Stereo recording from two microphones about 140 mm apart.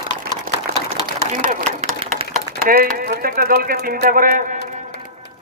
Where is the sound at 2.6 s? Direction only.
90° right.